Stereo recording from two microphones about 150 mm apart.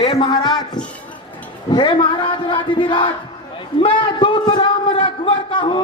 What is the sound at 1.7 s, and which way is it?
Speech, 30° left (ahead or behind).